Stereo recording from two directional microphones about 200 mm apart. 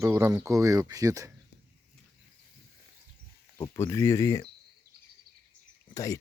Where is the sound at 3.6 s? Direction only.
15° left (ahead or behind).